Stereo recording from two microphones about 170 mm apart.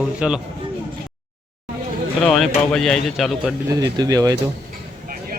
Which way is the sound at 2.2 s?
5° left (ahead or behind).